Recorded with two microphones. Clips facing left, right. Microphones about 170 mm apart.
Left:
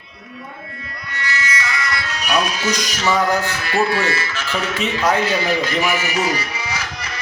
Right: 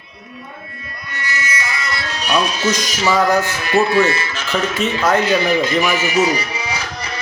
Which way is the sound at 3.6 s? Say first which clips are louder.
Right 4 dB; 20° right (ahead or behind).